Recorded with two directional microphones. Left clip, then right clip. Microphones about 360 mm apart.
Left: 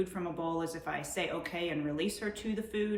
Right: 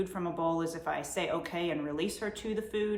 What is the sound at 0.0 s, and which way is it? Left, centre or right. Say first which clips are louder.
Speech: right 3 dB; centre.